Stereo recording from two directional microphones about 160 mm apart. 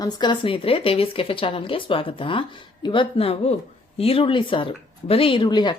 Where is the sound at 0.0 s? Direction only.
30° left (ahead or behind).